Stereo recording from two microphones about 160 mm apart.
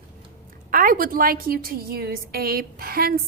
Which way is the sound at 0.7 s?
60° right (ahead or behind).